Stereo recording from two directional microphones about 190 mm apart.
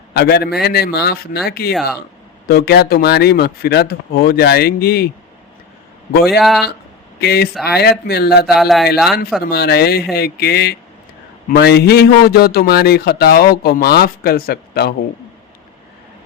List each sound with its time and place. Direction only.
0.1 s a man's voice: 55° left (ahead or behind)
6.4 s speech: centre (ahead or behind)
7.2 s a man's voice: 55° left (ahead or behind)
8.4 s speech: centre (ahead or behind)
9.5 s a man's voice: 55° left (ahead or behind)